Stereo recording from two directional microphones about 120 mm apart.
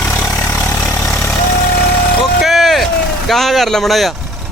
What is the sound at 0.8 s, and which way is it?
Vehicle, 10° left (ahead or behind).